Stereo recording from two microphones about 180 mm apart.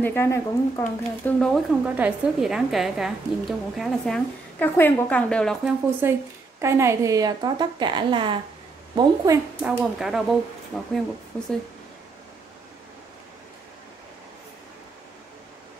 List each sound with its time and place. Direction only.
0.0 s speech: 15° left (ahead or behind)
1.4 s a woman's voice: centre (ahead or behind)
6.0 s a woman's voice: 15° right (ahead or behind)
9.6 s a woman's voice: 5° right (ahead or behind)
10.7 s speech: 10° left (ahead or behind)